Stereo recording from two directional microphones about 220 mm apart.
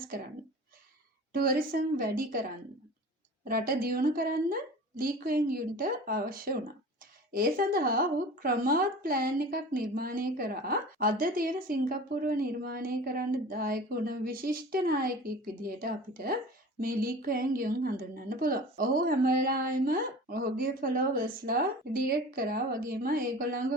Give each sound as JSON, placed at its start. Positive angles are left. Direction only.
{"t": 1.3, "sound": "a woman's voice", "side_deg": -40}
{"t": 3.4, "sound": "a woman's voice", "side_deg": -40}